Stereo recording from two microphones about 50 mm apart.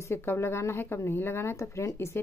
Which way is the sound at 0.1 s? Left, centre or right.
Left.